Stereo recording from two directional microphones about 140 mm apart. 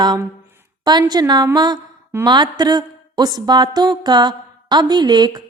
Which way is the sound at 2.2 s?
30° right (ahead or behind).